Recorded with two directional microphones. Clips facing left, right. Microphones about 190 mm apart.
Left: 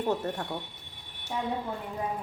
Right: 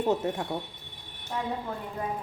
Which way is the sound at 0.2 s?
10° right (ahead or behind).